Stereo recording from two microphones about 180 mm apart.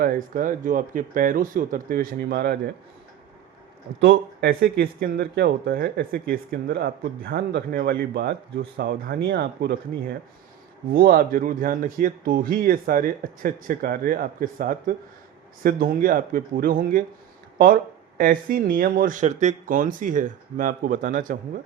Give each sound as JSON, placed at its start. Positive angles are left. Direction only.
{"t": 0.0, "sound": "speech", "side_deg": -50}
{"t": 4.0, "sound": "speech", "side_deg": -75}
{"t": 10.9, "sound": "speech", "side_deg": -55}
{"t": 18.2, "sound": "speech", "side_deg": -50}